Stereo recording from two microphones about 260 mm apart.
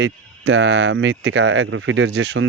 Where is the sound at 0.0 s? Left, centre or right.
Right.